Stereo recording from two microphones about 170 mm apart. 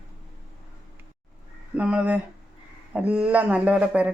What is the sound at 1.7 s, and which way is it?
Speech, 5° right (ahead or behind).